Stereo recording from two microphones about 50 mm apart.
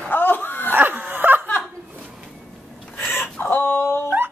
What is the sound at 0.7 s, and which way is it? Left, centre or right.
Dog, right.